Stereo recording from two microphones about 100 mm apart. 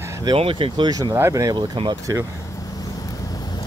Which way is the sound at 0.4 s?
60° right (ahead or behind).